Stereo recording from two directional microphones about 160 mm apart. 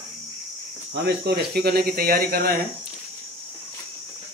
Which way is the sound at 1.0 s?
80° right.